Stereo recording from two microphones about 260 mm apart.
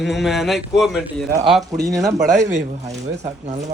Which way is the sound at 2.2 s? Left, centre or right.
Centre.